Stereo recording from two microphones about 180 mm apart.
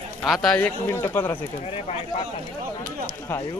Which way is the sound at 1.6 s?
35° left (ahead or behind).